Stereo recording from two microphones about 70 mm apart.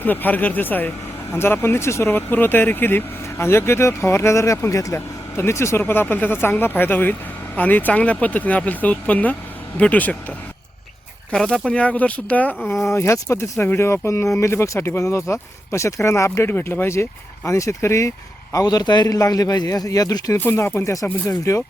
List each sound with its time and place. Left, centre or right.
0.0 s speech: left
2.1 s speech: left
4.9 s speech: left
5.9 s speech: left
11.3 s speech: centre
12.8 s speech: left
16.3 s speech: left
18.5 s speech: left
19.0 s a man's voice: left